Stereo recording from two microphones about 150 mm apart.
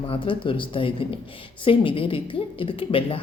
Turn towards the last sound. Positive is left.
turn(degrees=35)  # may be behind; listen again after turning